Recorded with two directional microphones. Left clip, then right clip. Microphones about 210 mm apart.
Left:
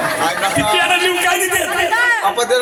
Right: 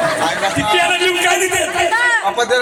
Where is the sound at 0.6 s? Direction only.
25° left (ahead or behind).